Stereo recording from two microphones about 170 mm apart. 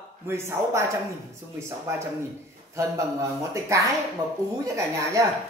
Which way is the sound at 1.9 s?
15° right (ahead or behind).